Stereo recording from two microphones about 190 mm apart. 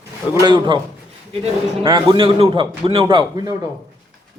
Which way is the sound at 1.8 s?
25° right (ahead or behind).